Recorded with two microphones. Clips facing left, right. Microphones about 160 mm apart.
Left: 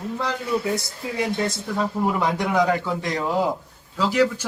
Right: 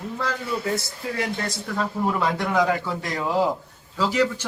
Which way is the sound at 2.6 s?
Centre (ahead or behind).